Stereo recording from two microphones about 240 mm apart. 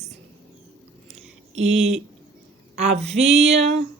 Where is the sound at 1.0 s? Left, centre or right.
Right.